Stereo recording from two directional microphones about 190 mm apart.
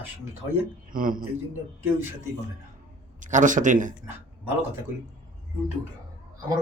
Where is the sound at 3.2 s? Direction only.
40° right (ahead or behind).